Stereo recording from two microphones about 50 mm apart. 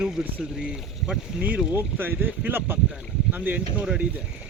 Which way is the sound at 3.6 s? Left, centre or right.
Centre.